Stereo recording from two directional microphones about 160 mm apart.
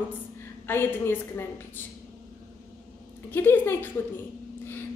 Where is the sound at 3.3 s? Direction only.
15° left (ahead or behind).